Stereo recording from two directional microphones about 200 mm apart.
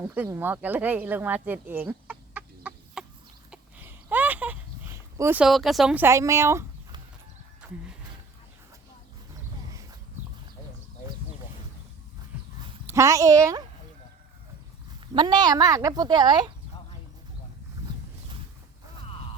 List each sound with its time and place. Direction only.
0.0 s speech: 10° right (ahead or behind)
3.5 s a sound: 10° right (ahead or behind)
12.9 s a woman's voice: 15° right (ahead or behind)
15.0 s speech: 25° right (ahead or behind)